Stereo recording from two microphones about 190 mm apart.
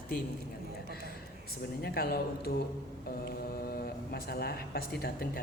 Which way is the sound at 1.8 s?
55° left (ahead or behind).